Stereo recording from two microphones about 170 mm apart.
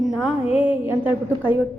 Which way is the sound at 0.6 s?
10° right (ahead or behind).